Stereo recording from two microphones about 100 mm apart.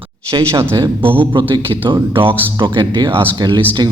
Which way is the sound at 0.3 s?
50° right (ahead or behind).